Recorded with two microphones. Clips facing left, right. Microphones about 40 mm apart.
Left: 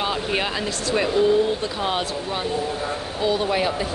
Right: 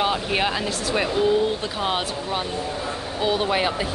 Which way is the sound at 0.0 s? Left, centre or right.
Centre.